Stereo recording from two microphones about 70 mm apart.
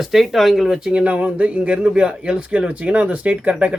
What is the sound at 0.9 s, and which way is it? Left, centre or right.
Speech, centre.